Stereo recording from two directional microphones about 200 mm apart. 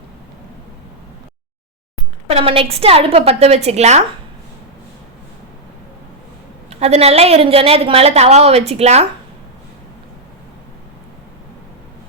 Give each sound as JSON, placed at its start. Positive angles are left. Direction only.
{"t": 2.3, "sound": "a woman's voice", "side_deg": -30}
{"t": 6.7, "sound": "a woman's voice", "side_deg": -30}